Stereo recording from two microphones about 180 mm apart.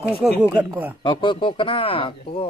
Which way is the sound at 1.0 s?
25° left (ahead or behind).